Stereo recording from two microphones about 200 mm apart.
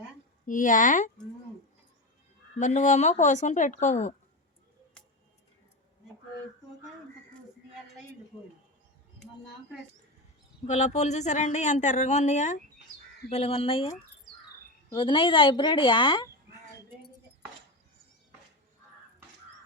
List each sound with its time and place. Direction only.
0.4 s speech: 40° left (ahead or behind)
2.6 s speech: 35° left (ahead or behind)
10.7 s a woman's voice: 35° left (ahead or behind)
14.9 s a woman's voice: 25° left (ahead or behind)